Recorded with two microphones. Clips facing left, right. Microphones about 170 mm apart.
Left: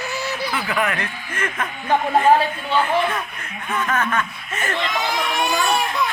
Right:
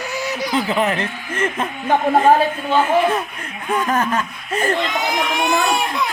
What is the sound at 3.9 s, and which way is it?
Speech, 30° right (ahead or behind).